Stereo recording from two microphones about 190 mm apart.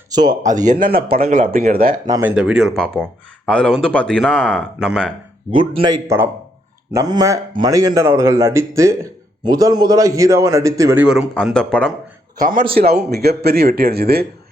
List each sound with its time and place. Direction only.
0.1 s speech: 20° right (ahead or behind)
0.4 s speech: 40° right (ahead or behind)
2.0 s speech: 20° right (ahead or behind)
2.3 s speech: 5° right (ahead or behind)
5.5 s a man's voice: 25° right (ahead or behind); by 11.3 s 5° right (ahead or behind)
11.3 s speech: 5° left (ahead or behind)
12.4 s speech: 45° right (ahead or behind)